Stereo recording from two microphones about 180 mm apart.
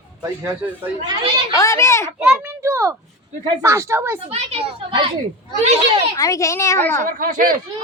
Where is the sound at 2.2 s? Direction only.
10° right (ahead or behind).